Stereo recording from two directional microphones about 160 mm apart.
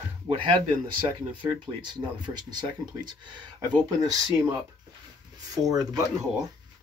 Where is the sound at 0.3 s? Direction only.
30° right (ahead or behind).